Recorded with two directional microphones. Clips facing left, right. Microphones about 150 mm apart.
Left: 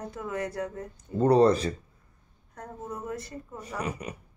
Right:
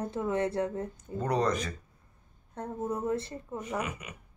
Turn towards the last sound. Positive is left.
turn(degrees=35)  # may be behind; listen again after turning